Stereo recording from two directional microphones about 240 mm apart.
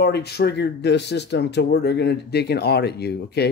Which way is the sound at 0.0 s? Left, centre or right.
Left.